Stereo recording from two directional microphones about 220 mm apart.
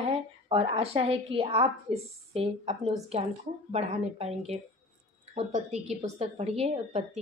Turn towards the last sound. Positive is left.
turn(degrees=-30)  # may be behind; listen again after turning